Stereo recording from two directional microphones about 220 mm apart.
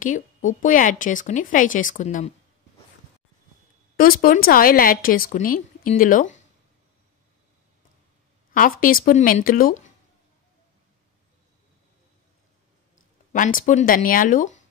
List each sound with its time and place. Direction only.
0.0 s a woman's voice: 35° left (ahead or behind)
3.9 s a woman's voice: 40° left (ahead or behind)
8.5 s a woman's voice: 40° left (ahead or behind)
13.3 s a woman's voice: 35° left (ahead or behind)